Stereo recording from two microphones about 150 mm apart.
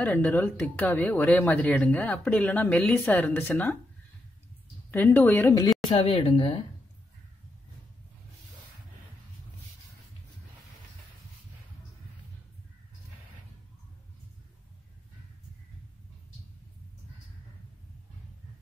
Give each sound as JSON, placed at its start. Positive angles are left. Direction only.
{"t": 0.0, "sound": "speech", "side_deg": 10}
{"t": 4.9, "sound": "speech", "side_deg": 15}
{"t": 5.9, "sound": "speech", "side_deg": 35}